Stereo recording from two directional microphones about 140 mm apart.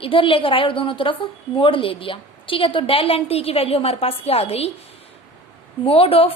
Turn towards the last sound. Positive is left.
turn(degrees=45)  # may be behind; listen again after turning